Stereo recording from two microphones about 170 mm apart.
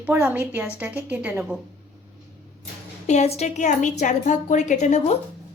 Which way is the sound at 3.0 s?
40° left (ahead or behind).